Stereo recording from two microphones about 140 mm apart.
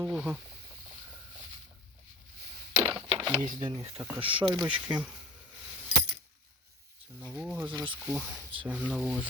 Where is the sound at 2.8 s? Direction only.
40° right (ahead or behind).